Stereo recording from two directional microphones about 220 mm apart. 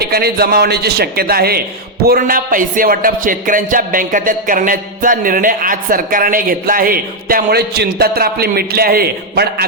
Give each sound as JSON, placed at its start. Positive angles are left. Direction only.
{"t": 0.0, "sound": "a man's voice", "side_deg": -45}